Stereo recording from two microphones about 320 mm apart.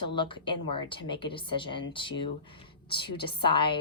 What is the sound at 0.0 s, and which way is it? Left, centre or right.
A woman's voice, centre.